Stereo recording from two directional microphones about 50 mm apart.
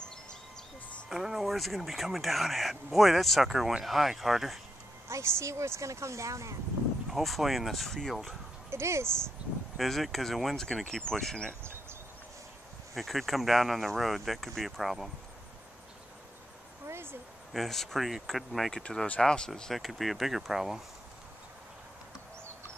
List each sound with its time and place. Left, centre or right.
1.0 s speech: centre
5.0 s a woman's voice: right
7.1 s speech: centre
8.6 s speech: right
9.4 s speech: right
9.8 s speech: centre
12.9 s speech: centre
16.8 s a sound: right
17.5 s speech: centre
18.7 s speech: centre
19.7 s speech: centre